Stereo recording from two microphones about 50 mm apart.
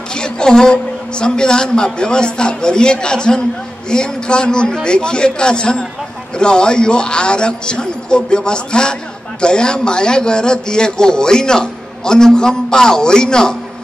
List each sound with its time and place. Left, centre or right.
0.1 s a woman's voice: centre